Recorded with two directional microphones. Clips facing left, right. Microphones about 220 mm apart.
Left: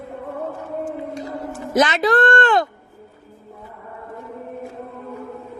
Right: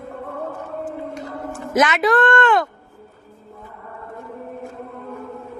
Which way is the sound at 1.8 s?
30° left (ahead or behind).